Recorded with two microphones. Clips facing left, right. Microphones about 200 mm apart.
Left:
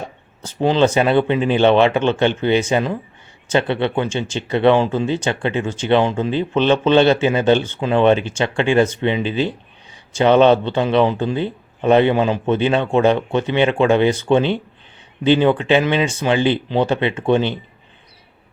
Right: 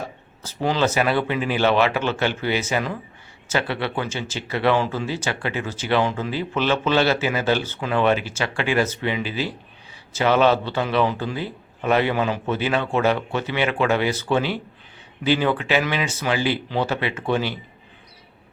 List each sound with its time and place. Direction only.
0.4 s speech: 25° left (ahead or behind)